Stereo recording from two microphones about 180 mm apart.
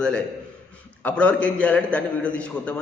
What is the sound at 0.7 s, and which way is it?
A man's voice, 5° left (ahead or behind).